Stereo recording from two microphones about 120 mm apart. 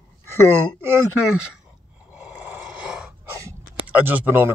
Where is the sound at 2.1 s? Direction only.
15° right (ahead or behind).